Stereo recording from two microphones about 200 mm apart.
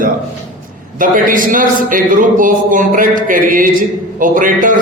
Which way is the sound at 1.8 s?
40° right (ahead or behind).